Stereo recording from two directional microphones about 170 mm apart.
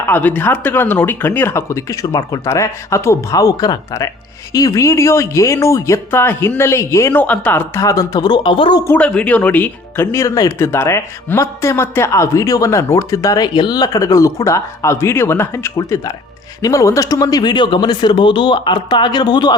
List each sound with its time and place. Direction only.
0.1 s speech: 10° left (ahead or behind); by 8.8 s 30° left (ahead or behind)
8.8 s speech: 10° left (ahead or behind); by 19.5 s 25° left (ahead or behind)